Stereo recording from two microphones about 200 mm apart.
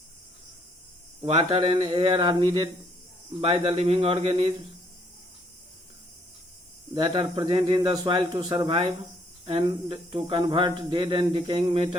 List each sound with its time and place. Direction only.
1.2 s speech: 30° right (ahead or behind)
6.9 s speech: 25° right (ahead or behind)